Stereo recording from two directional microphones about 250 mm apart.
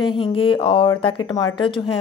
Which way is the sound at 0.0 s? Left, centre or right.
Left.